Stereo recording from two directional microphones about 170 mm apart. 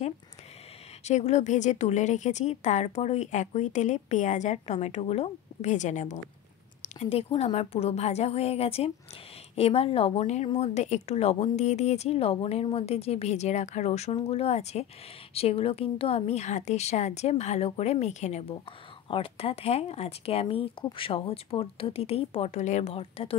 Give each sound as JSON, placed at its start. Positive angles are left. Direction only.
{"t": 1.0, "sound": "a woman's voice", "side_deg": 40}